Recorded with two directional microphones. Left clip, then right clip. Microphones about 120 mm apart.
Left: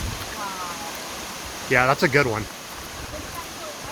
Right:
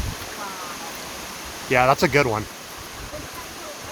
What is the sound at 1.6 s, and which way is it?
Speech, 30° right (ahead or behind).